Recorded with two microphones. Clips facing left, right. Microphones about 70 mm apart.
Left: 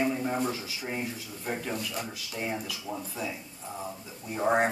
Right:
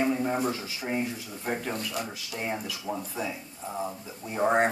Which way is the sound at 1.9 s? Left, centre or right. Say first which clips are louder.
Right 2 dB; centre.